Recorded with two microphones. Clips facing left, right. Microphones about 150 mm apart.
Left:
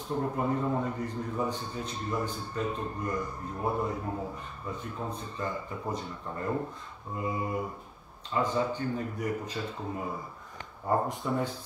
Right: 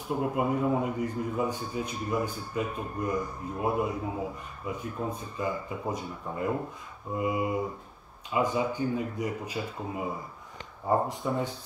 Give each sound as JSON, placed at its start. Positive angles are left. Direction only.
{"t": 0.1, "sound": "a man's voice", "side_deg": -10}